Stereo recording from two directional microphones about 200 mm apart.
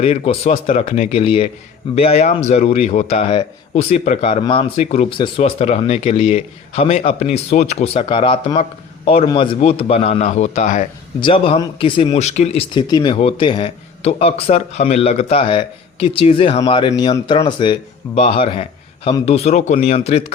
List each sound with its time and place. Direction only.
0.0 s a man's voice: 30° left (ahead or behind)
11.2 s speech: 25° left (ahead or behind)
12.7 s a man's voice: 25° left (ahead or behind)